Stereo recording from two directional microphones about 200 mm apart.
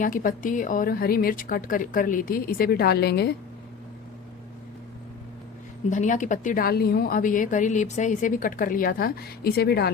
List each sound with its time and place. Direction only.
0.0 s a woman's voice: 45° left (ahead or behind)
5.9 s a woman's voice: 40° left (ahead or behind)